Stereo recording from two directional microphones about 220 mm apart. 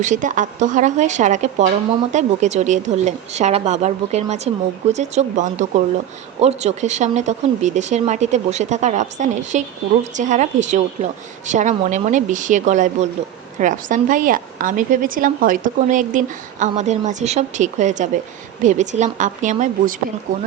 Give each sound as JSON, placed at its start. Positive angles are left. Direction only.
{"t": 0.0, "sound": "a woman's voice", "side_deg": -35}